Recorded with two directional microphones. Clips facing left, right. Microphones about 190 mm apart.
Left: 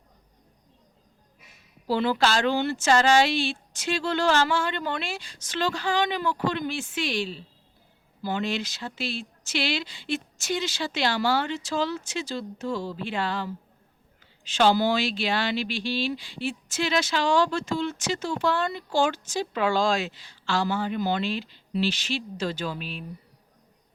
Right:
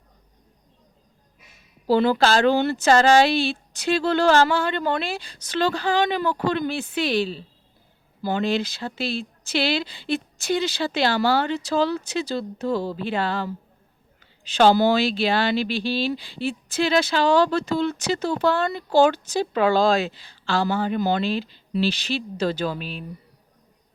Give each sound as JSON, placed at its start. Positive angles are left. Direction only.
{"t": 1.9, "sound": "speech", "side_deg": -40}